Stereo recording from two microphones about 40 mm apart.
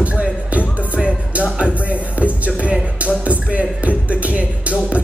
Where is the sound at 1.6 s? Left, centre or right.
Right.